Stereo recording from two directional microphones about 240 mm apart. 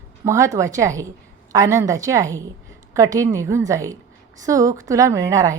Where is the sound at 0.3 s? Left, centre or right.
Centre.